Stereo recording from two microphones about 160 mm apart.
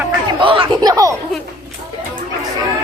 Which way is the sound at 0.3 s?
35° right (ahead or behind).